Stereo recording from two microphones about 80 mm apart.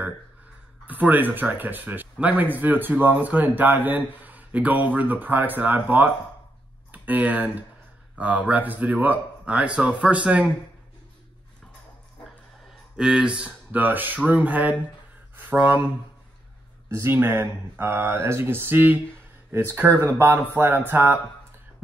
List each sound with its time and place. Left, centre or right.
0.8 s speech: right
12.9 s speech: centre
17.1 s speech: right